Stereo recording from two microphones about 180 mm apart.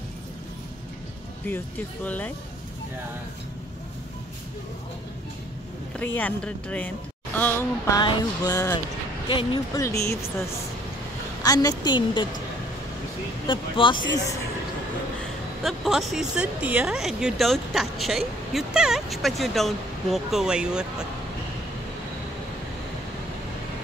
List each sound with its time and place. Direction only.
2.0 s speech: 10° left (ahead or behind)
5.9 s a woman's voice: 10° left (ahead or behind)
11.4 s a woman's voice: 20° left (ahead or behind)
13.5 s a woman's voice: 25° left (ahead or behind)
15.6 s speech: centre (ahead or behind)